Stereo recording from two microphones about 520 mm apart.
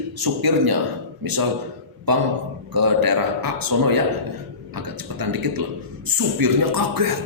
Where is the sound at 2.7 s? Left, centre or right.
Right.